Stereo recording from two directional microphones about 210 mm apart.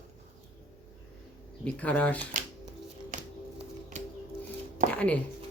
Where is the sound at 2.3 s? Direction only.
40° right (ahead or behind).